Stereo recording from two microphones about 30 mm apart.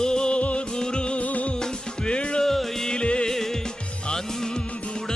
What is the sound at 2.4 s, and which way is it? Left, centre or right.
Music, centre.